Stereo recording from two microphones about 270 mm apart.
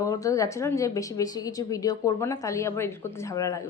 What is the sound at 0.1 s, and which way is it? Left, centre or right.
Speech, centre.